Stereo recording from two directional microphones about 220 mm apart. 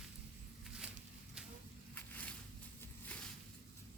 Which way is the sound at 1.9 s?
5° left (ahead or behind).